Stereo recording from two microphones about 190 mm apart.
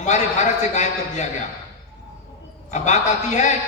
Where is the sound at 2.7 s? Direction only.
40° left (ahead or behind).